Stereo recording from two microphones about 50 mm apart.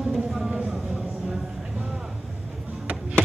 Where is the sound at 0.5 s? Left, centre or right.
Centre.